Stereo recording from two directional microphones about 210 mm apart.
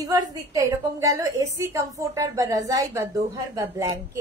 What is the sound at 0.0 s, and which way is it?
A woman's voice, 15° right (ahead or behind).